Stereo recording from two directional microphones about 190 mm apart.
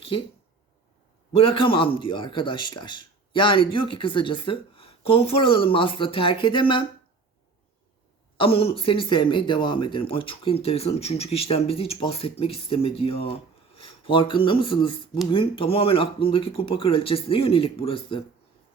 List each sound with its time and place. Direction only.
1.4 s a man's voice: 25° left (ahead or behind)
8.4 s a man's voice: 30° left (ahead or behind)